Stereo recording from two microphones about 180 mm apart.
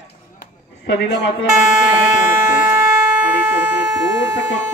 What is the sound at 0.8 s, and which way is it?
Speech, 70° left (ahead or behind).